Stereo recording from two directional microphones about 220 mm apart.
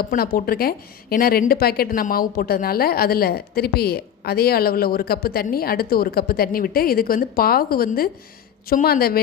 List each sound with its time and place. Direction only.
0.0 s a woman's voice: 45° left (ahead or behind)